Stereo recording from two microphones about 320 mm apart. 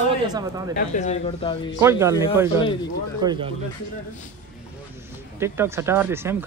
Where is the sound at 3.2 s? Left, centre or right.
Centre.